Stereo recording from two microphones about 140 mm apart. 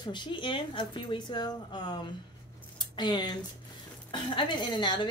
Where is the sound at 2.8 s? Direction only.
30° left (ahead or behind).